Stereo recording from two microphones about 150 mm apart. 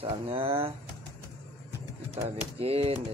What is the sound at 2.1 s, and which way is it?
Speech, 45° right (ahead or behind).